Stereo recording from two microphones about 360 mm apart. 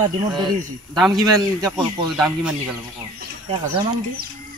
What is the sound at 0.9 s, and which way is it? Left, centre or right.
Speech, centre.